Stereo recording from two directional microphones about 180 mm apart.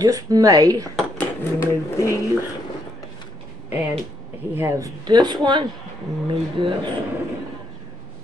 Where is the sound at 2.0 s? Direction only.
15° left (ahead or behind).